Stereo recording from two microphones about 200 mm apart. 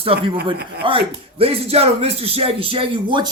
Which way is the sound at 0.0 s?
30° right (ahead or behind).